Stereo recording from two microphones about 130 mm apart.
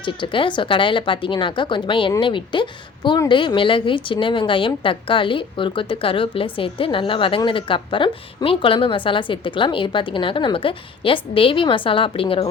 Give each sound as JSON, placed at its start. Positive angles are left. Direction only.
{"t": 0.0, "sound": "a woman's voice", "side_deg": 40}